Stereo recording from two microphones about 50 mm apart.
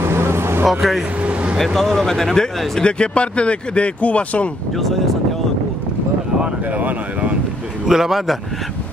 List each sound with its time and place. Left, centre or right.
0.0 s vehicle: right
0.7 s speech: centre
1.2 s vehicle: right
1.6 s speech: centre; by 4.5 s left
4.7 s speech: centre
6.4 s speech: right
7.8 s a man's voice: centre